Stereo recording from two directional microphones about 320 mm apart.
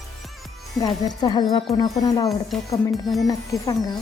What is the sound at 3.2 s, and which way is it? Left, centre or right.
Speech, centre.